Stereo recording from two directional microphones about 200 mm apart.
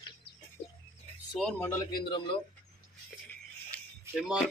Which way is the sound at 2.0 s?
25° left (ahead or behind).